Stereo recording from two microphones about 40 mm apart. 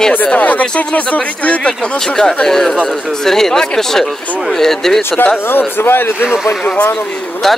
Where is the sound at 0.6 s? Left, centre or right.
Left.